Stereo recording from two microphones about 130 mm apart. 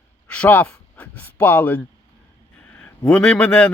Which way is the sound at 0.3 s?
10° left (ahead or behind).